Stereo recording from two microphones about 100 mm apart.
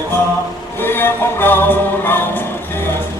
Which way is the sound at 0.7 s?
20° left (ahead or behind).